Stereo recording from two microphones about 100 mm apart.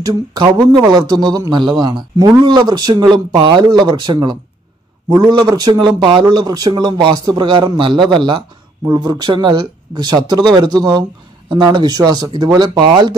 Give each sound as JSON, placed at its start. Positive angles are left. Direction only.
{"t": 0.0, "sound": "speech", "side_deg": -45}